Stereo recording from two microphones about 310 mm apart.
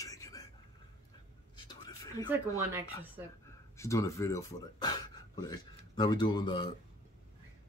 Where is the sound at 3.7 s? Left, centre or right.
Centre.